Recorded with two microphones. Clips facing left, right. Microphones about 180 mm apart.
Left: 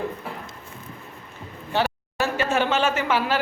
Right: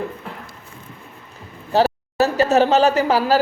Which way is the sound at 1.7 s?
40° right (ahead or behind).